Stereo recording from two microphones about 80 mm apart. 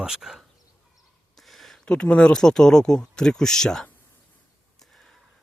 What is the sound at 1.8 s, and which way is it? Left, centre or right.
Speech, centre.